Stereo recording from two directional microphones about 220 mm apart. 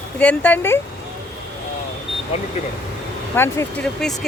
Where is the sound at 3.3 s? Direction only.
10° left (ahead or behind).